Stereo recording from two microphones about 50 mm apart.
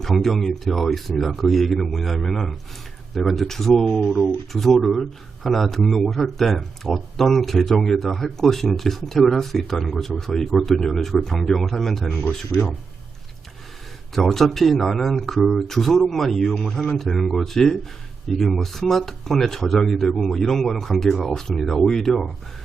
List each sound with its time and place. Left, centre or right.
0.0 s speech: centre
12.0 s speech: left
12.3 s speech: centre
14.1 s speech: centre